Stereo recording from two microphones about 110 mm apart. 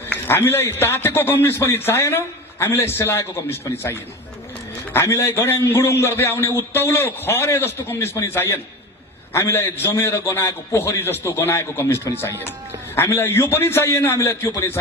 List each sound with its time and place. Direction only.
0.1 s a man's voice: 20° left (ahead or behind)